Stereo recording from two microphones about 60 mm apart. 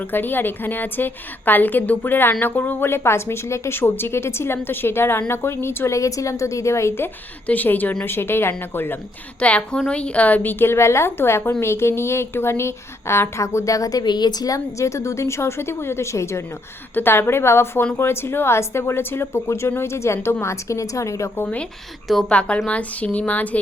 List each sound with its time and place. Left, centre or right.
0.1 s a woman's voice: left
2.9 s a woman's voice: left
3.8 s a woman's voice: left
6.0 s a woman's voice: left
7.4 s speech: left
8.0 s a woman's voice: left
9.4 s a woman's voice: left
16.9 s a woman's voice: left
21.4 s speech: left
22.0 s a woman's voice: centre
22.3 s speech: centre